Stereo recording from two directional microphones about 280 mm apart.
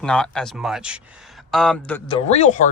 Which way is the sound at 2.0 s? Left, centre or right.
Left.